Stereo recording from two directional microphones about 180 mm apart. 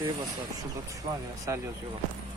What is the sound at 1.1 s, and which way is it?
Speech, 25° right (ahead or behind).